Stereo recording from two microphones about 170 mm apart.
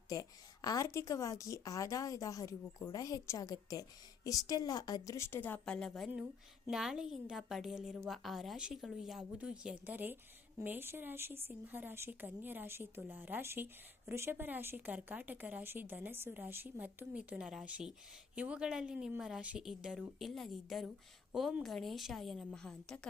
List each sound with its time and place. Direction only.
0.1 s a woman's voice: 20° left (ahead or behind); by 23.0 s 5° left (ahead or behind)